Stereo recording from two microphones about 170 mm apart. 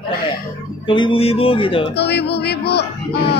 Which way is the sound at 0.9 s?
30° left (ahead or behind).